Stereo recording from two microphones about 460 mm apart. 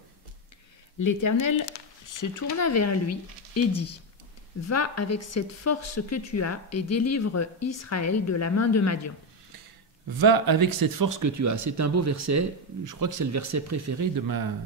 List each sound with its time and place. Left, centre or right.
0.9 s speech: left
10.1 s speech: right